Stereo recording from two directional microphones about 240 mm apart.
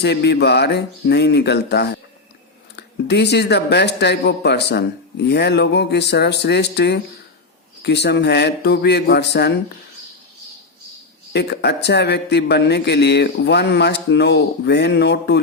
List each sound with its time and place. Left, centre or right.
0.0 s speech: left
11.3 s speech: left